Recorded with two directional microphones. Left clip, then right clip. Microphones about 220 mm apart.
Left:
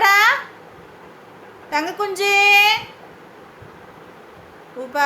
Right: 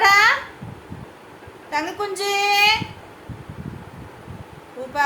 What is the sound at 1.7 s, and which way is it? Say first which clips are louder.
A woman's voice: left 3 dB; 20° left (ahead or behind).